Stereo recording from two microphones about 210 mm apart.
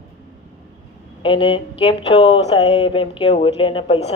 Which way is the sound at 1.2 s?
25° left (ahead or behind).